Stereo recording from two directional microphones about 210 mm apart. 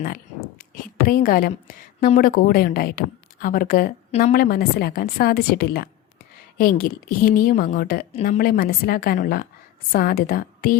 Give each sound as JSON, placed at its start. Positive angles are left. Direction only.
{"t": 0.9, "sound": "a woman's voice", "side_deg": 40}